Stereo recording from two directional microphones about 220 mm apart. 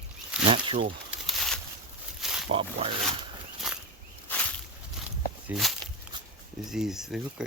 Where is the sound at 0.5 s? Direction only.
25° right (ahead or behind).